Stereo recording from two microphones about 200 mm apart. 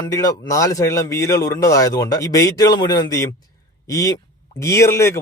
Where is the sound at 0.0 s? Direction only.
15° left (ahead or behind).